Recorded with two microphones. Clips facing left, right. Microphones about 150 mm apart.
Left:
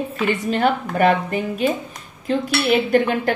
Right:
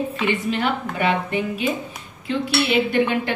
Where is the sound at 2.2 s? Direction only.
40° left (ahead or behind).